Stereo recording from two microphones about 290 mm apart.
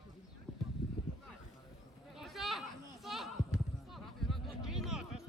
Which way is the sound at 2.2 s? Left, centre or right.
Centre.